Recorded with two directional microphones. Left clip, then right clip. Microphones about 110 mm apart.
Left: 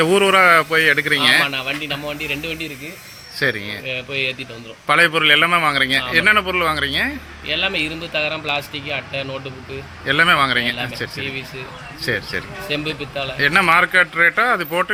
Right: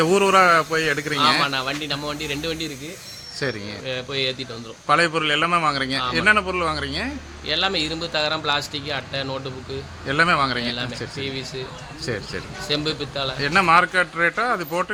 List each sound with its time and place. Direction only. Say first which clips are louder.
0.0 s a man's voice: left 3 dB; 5° left (ahead or behind)
1.5 s speech: left 2 dB; 30° right (ahead or behind)
3.3 s a man's voice: left 7 dB; 10° left (ahead or behind)
3.8 s speech: left 1 dB; 30° right (ahead or behind)
4.9 s a man's voice: left 5 dB; 10° left (ahead or behind)
7.5 s speech: left 2 dB; 30° right (ahead or behind)
10.1 s a man's voice: left 4 dB; 10° left (ahead or behind)
12.0 s a man's voice: left 7 dB; 10° left (ahead or behind)
12.8 s speech: left 1 dB; 30° right (ahead or behind)
13.4 s a man's voice: left 3 dB; 10° left (ahead or behind)